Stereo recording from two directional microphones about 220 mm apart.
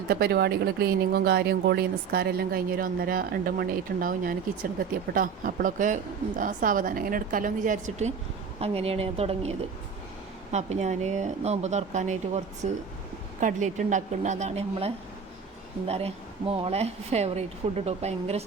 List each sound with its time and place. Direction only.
0.1 s speech: 45° right (ahead or behind); by 18.4 s 30° right (ahead or behind)